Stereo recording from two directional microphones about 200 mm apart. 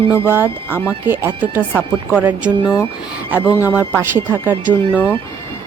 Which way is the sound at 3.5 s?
15° left (ahead or behind).